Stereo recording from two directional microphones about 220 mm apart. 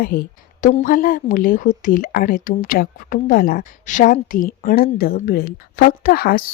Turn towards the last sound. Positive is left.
turn(degrees=40)  # may be behind; listen again after turning